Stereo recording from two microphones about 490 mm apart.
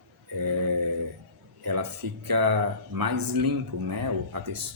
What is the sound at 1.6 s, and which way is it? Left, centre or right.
Speech, right.